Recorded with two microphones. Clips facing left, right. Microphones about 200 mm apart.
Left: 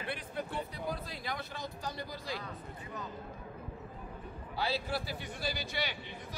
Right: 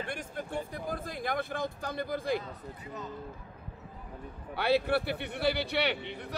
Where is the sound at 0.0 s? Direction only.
45° right (ahead or behind).